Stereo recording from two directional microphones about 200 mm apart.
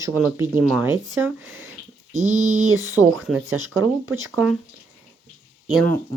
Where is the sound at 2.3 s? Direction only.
90° right.